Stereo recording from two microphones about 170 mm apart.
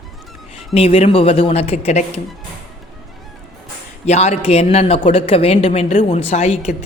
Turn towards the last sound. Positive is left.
turn(degrees=40)  # may be behind; listen again after turning